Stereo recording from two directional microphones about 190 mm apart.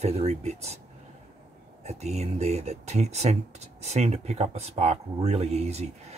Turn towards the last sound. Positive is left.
turn(degrees=-35)  # may be behind; listen again after turning